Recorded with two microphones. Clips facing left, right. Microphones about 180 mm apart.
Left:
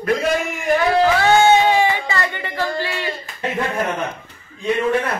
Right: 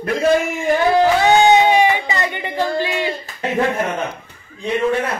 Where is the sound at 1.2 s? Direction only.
15° right (ahead or behind).